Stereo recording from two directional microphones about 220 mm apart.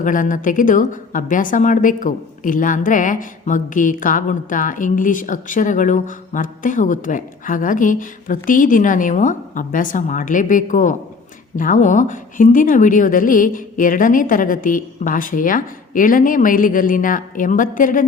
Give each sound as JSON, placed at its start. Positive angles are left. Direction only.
{"t": 0.0, "sound": "speech", "side_deg": 35}